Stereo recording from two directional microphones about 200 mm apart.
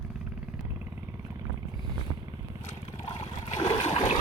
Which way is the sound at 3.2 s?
30° left (ahead or behind).